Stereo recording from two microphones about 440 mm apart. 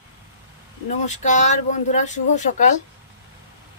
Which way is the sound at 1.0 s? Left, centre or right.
Centre.